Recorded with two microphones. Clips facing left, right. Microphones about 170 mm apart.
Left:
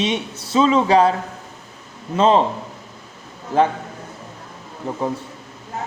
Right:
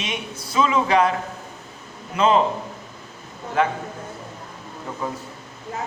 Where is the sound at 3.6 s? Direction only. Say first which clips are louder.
Left 4 dB; 30° left (ahead or behind).